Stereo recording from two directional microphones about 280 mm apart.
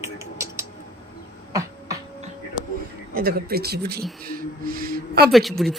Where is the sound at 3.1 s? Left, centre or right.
Right.